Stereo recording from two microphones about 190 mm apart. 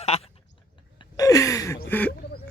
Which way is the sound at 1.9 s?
10° left (ahead or behind).